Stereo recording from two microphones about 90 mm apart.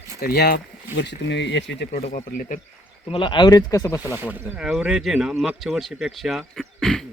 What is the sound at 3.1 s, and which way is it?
Speech, 65° left (ahead or behind).